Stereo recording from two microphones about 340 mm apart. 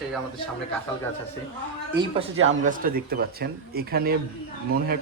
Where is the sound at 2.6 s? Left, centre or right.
Right.